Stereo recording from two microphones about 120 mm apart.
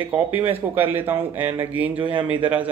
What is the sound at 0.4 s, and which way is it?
Speech, 15° right (ahead or behind).